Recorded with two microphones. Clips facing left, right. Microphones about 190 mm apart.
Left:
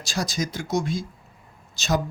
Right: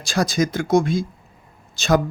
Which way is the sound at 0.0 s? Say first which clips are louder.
Right 7 dB; 55° right (ahead or behind).